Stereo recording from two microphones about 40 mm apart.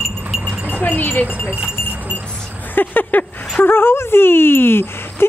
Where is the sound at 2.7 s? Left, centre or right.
Left.